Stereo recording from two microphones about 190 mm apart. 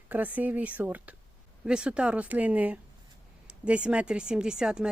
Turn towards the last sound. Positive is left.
turn(degrees=-5)  # may be behind; listen again after turning